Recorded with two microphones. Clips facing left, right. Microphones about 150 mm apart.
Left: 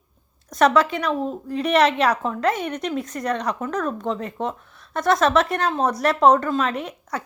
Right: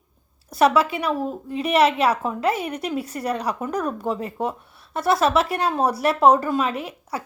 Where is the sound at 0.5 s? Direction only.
5° right (ahead or behind).